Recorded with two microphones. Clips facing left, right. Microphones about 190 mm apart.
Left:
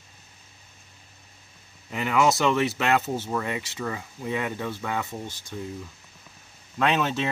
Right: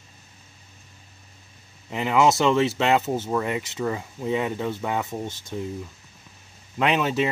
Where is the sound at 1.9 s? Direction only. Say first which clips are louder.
Right 3 dB; 20° right (ahead or behind).